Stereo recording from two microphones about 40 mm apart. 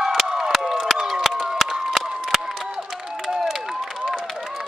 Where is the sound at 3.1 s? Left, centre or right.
Centre.